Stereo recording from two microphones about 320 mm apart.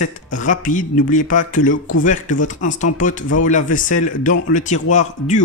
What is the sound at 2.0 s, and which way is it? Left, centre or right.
Speech, left.